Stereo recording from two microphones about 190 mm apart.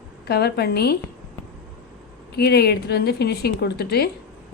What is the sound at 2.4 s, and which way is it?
A woman's voice, 55° left (ahead or behind).